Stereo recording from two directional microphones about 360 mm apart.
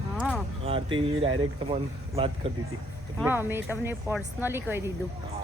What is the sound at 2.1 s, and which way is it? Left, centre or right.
Speech, centre.